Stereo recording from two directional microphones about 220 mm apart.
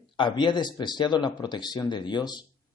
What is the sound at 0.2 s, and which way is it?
A man's voice, 20° left (ahead or behind).